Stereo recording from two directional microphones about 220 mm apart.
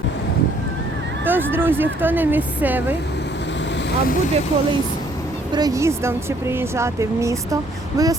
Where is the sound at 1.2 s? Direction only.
10° right (ahead or behind).